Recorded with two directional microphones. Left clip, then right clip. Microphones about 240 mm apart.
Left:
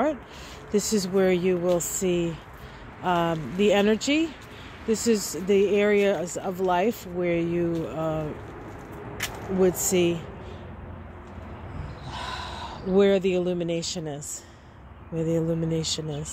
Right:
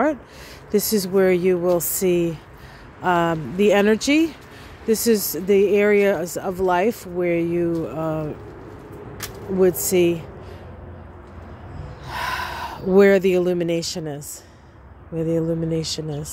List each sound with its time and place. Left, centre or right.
0.7 s speech: centre
9.6 s speech: centre
12.1 s speech: right